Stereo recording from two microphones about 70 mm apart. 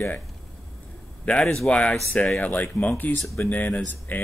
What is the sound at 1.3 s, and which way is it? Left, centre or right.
Speech, left.